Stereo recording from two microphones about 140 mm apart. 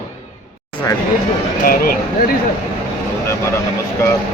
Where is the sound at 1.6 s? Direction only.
90° left.